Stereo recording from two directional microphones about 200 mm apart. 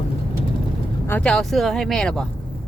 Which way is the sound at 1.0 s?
5° left (ahead or behind).